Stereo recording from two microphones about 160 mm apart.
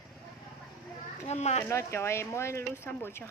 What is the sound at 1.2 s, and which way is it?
Speech, 45° left (ahead or behind).